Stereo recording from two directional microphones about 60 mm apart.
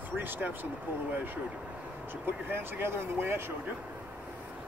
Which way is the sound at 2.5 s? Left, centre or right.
Right.